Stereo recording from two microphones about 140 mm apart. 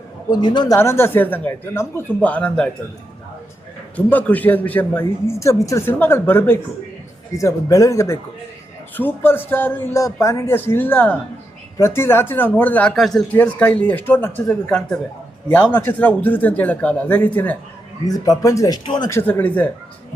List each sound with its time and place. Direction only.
0.3 s a man's voice: 30° left (ahead or behind)
0.8 s a woman's voice: 15° left (ahead or behind)
3.9 s a woman's voice: 10° left (ahead or behind)
13.0 s a woman's voice: centre (ahead or behind)
18.0 s a man's voice: 25° left (ahead or behind)
19.1 s a woman's voice: 15° left (ahead or behind)